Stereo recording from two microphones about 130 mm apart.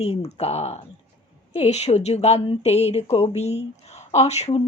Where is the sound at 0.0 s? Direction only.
55° left (ahead or behind).